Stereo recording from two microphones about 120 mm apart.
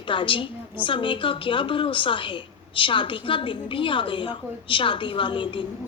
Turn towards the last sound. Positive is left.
turn(degrees=40)  # may be behind; listen again after turning